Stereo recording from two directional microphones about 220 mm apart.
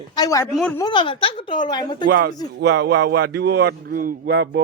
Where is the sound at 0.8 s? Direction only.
20° left (ahead or behind).